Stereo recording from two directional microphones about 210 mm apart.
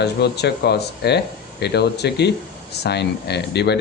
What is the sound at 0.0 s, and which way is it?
A man's voice, 50° left (ahead or behind).